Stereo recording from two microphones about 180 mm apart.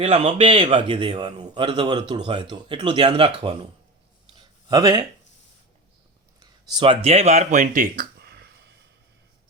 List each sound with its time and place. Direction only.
0.0 s a man's voice: 30° right (ahead or behind)
4.4 s a sound: 20° right (ahead or behind)
6.4 s speech: 25° right (ahead or behind); by 8.7 s 65° right (ahead or behind)